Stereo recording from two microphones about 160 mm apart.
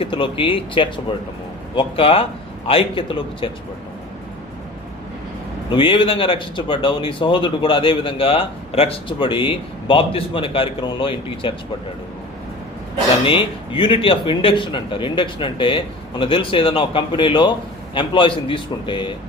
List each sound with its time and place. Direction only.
0.0 s speech: 30° left (ahead or behind)
5.7 s speech: 35° left (ahead or behind)
13.2 s speech: 35° left (ahead or behind)